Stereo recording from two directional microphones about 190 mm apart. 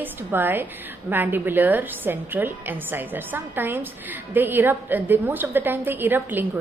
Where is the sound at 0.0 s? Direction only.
10° right (ahead or behind).